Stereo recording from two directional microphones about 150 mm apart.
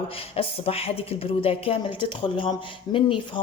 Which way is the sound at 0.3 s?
40° left (ahead or behind).